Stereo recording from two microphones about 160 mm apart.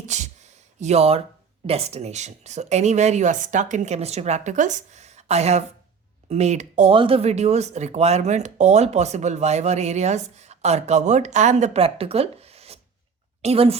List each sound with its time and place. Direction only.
0.0 s a sound: 45° right (ahead or behind)
1.6 s speech: 40° right (ahead or behind)
6.9 s a woman's voice: 35° right (ahead or behind)